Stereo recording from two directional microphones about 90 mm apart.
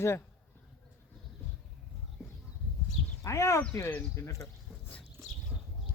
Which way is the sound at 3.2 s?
35° left (ahead or behind).